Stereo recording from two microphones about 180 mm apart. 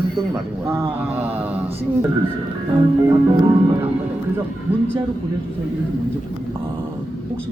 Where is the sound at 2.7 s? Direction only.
25° right (ahead or behind).